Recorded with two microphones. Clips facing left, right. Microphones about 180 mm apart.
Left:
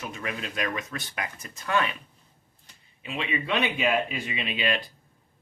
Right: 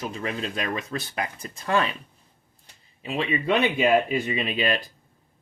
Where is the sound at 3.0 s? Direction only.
35° right (ahead or behind).